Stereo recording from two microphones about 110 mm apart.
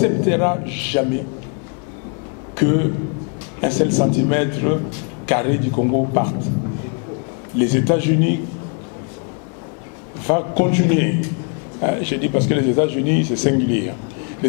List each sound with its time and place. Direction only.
0.0 s speech: 15° left (ahead or behind)
2.5 s a man's voice: 15° left (ahead or behind)
7.7 s speech: 15° left (ahead or behind)
10.2 s speech: 15° left (ahead or behind)